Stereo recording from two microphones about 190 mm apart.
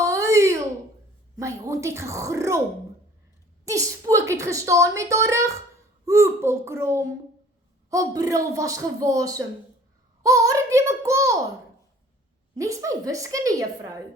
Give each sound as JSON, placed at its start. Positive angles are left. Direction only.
{"t": 0.0, "sound": "a sound", "side_deg": -15}
{"t": 1.4, "sound": "a woman's voice", "side_deg": -15}
{"t": 3.7, "sound": "a woman's voice", "side_deg": -15}
{"t": 12.5, "sound": "a woman's voice", "side_deg": -15}